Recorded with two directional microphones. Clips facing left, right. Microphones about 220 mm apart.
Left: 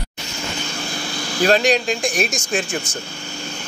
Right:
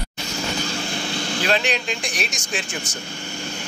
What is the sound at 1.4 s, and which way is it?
Speech, 40° left (ahead or behind).